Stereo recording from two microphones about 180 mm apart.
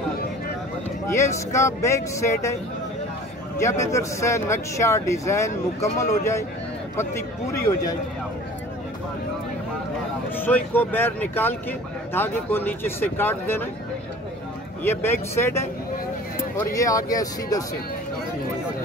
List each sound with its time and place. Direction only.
1.0 s speech: 15° left (ahead or behind)
3.5 s speech: 15° left (ahead or behind)
10.4 s speech: 10° left (ahead or behind)
14.8 s speech: 15° left (ahead or behind)